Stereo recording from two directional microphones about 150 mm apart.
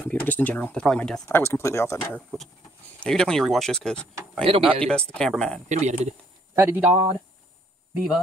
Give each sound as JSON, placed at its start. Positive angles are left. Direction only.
{"t": 0.0, "sound": "speech", "side_deg": 10}
{"t": 1.4, "sound": "speech", "side_deg": 15}
{"t": 2.1, "sound": "speech", "side_deg": 0}
{"t": 4.5, "sound": "speech", "side_deg": -40}
{"t": 5.1, "sound": "speech", "side_deg": 5}
{"t": 5.7, "sound": "speech", "side_deg": -50}
{"t": 6.5, "sound": "speech", "side_deg": -15}